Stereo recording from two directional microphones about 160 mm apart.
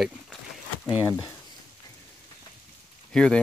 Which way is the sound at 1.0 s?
15° left (ahead or behind).